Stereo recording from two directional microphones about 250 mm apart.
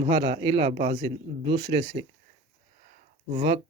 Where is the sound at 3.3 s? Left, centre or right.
Right.